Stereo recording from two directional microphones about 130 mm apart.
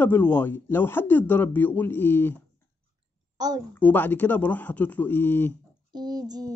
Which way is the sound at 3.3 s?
30° right (ahead or behind).